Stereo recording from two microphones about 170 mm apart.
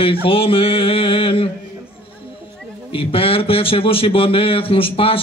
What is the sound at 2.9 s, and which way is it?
Speech, 35° left (ahead or behind).